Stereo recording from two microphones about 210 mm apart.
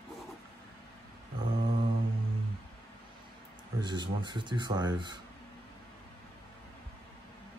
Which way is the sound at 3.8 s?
20° right (ahead or behind).